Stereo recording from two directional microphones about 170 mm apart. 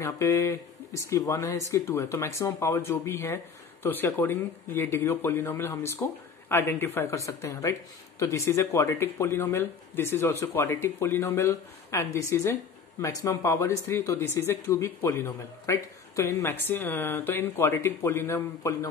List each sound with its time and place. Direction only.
0.0 s speech: 20° left (ahead or behind)